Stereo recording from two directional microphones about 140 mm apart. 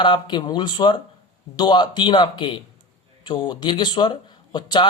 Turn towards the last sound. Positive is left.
turn(degrees=30)  # may be behind; listen again after turning